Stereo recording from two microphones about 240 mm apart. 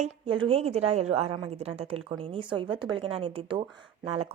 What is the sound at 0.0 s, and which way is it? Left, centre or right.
A woman's voice, right.